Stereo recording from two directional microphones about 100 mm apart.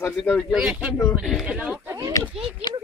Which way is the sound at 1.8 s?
30° right (ahead or behind).